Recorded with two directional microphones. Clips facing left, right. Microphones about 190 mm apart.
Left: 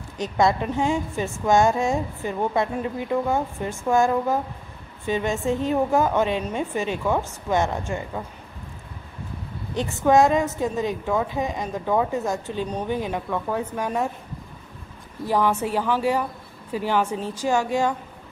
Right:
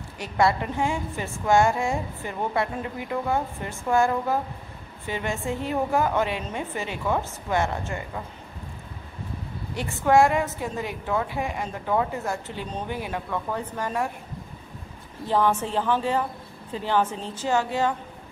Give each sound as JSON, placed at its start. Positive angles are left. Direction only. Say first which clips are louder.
{"t": 0.2, "sound": "a woman's voice", "louder": "left 2 dB", "side_deg": 20}
{"t": 9.8, "sound": "a woman's voice", "louder": "left 2 dB", "side_deg": 20}
{"t": 15.2, "sound": "a woman's voice", "louder": "left 1 dB", "side_deg": 10}